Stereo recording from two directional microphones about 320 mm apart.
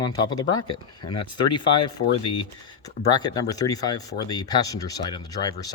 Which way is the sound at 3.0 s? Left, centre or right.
Centre.